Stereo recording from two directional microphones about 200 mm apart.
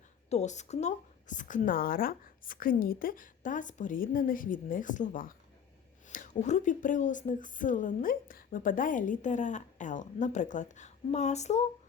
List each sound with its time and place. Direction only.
0.3 s speech: 35° left (ahead or behind)